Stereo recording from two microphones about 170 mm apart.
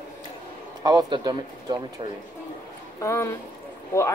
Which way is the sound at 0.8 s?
25° right (ahead or behind).